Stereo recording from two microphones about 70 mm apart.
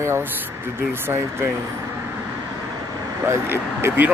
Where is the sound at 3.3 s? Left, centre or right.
Right.